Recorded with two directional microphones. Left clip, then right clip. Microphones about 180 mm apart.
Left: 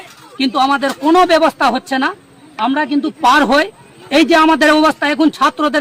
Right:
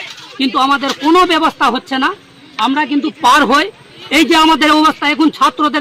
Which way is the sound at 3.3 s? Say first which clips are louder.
Right 2 dB; 30° left (ahead or behind).